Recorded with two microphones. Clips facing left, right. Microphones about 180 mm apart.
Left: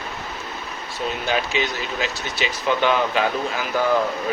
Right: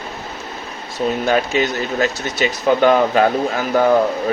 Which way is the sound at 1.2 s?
50° right (ahead or behind).